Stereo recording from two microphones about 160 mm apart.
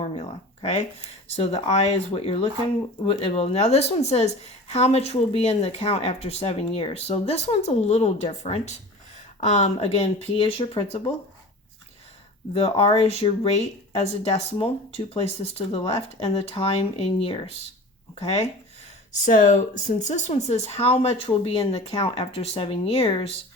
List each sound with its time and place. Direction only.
0.0 s a woman's voice: 45° left (ahead or behind)
12.5 s a woman's voice: 35° left (ahead or behind)
19.2 s a woman's voice: 55° left (ahead or behind); by 23.2 s 40° left (ahead or behind)